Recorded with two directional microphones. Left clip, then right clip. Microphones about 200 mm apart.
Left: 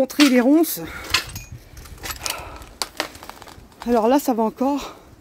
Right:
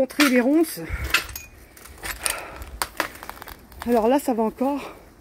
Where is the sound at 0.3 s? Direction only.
20° left (ahead or behind).